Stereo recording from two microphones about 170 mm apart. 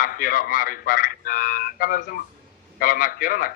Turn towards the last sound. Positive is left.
turn(degrees=55)  # may be behind; listen again after turning